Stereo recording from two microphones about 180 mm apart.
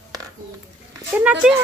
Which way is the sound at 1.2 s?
5° right (ahead or behind).